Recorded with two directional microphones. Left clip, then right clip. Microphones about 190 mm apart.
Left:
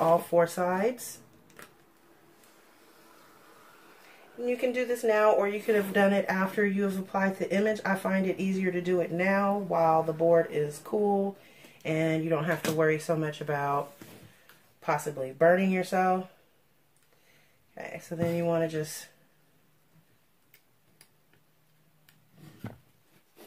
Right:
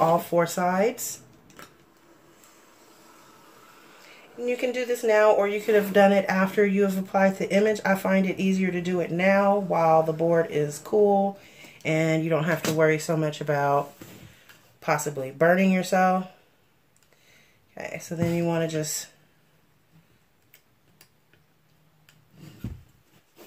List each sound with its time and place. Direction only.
0.3 s speech: 35° right (ahead or behind)
4.5 s speech: 35° right (ahead or behind)
14.8 s speech: 40° right (ahead or behind)
17.7 s speech: 35° right (ahead or behind)